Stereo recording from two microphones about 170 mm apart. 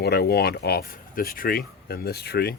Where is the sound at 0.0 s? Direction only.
70° left (ahead or behind).